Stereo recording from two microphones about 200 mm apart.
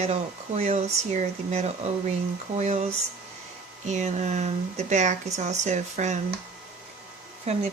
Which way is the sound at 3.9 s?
35° right (ahead or behind).